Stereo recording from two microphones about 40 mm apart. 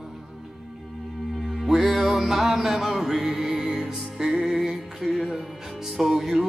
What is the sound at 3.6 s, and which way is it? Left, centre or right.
Music, right.